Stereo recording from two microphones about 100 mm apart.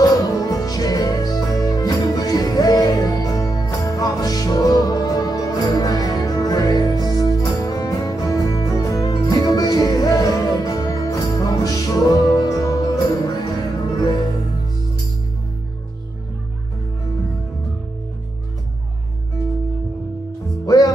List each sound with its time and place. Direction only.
0.0 s music: 40° left (ahead or behind)
20.6 s music: 40° left (ahead or behind)